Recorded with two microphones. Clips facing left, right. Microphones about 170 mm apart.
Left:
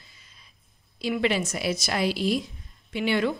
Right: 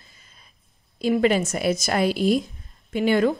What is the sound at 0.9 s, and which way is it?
A woman's voice, 45° right (ahead or behind).